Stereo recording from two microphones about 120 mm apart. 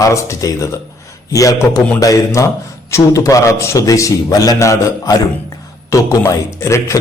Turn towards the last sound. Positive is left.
turn(degrees=25)  # may be behind; listen again after turning